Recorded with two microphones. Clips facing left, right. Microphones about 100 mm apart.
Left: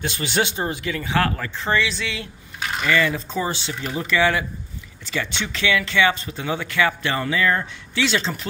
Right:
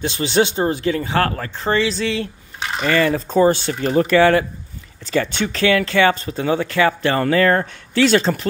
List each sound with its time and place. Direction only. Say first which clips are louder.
0.0 s speech: right 6 dB; 30° right (ahead or behind); by 8.4 s 45° right (ahead or behind)